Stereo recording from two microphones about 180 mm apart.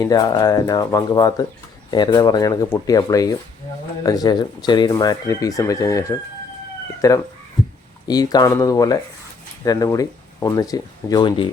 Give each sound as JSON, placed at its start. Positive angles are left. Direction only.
{"t": 0.0, "sound": "speech", "side_deg": 20}